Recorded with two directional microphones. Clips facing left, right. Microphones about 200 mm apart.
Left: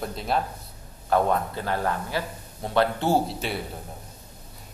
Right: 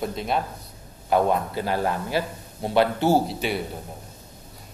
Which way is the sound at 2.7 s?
5° right (ahead or behind).